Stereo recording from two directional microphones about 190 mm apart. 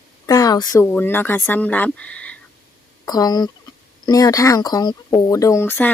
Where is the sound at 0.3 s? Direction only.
20° left (ahead or behind).